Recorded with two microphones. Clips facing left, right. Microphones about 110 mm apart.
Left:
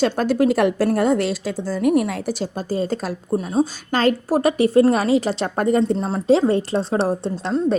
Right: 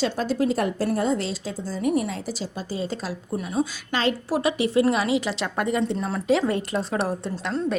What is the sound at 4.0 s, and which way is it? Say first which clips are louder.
A woman's voice: left 6 dB; 45° left (ahead or behind).